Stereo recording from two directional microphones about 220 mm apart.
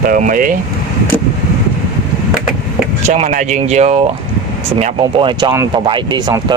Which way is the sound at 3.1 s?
35° right (ahead or behind).